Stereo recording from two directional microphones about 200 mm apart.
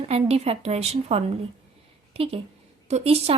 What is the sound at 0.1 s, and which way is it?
A woman's voice, 30° right (ahead or behind).